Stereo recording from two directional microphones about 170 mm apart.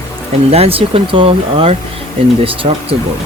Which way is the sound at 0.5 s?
35° right (ahead or behind).